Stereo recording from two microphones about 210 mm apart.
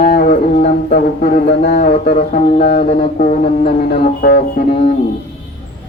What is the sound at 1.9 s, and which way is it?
Music, 35° left (ahead or behind).